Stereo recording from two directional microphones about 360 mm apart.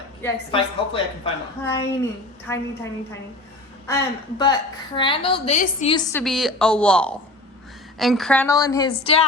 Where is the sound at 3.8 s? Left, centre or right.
Centre.